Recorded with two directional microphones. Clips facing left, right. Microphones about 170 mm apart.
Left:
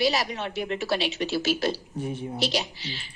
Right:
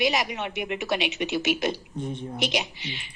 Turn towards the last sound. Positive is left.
turn(degrees=-20)  # may be behind; listen again after turning